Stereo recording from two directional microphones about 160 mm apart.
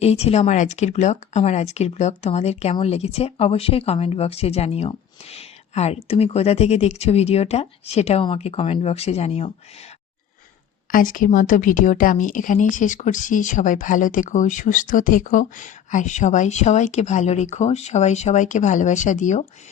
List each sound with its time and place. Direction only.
0.0 s a woman's voice: 40° left (ahead or behind)
10.9 s a woman's voice: 60° left (ahead or behind)